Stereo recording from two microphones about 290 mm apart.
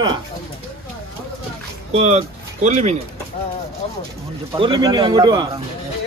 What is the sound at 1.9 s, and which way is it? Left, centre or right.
Speech, right.